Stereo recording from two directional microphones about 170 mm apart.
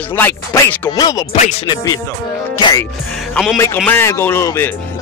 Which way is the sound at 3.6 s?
10° left (ahead or behind).